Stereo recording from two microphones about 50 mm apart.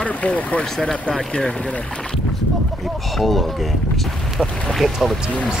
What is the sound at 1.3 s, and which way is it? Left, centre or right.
Speech, centre.